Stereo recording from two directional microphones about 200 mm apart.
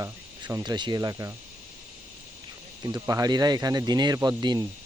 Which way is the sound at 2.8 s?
15° right (ahead or behind).